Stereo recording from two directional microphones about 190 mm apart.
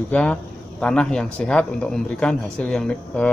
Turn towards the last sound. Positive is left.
turn(degrees=5)  # may be behind; listen again after turning